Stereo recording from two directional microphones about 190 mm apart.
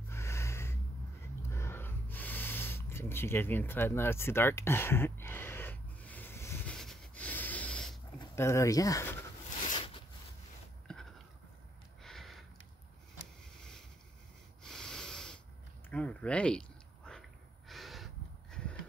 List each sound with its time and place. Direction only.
0.1 s snort: 15° left (ahead or behind)
1.5 s gasp: 15° left (ahead or behind)
8.2 s speech: 15° left (ahead or behind)
10.9 s a sound: 5° left (ahead or behind)
13.6 s boat: 5° left (ahead or behind)
14.6 s snort: 5° left (ahead or behind)
15.9 s a sound: 5° left (ahead or behind)